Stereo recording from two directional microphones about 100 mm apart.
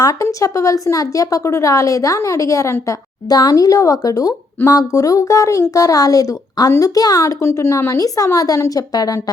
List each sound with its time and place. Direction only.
0.0 s speech: 35° left (ahead or behind)